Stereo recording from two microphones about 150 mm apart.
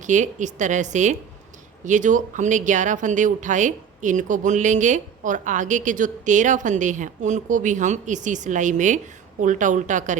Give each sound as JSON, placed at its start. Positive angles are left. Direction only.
{"t": 0.0, "sound": "speech", "side_deg": -55}